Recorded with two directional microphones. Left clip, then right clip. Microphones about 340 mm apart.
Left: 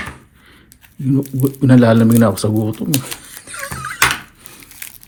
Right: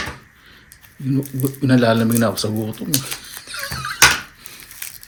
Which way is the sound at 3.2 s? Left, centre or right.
Centre.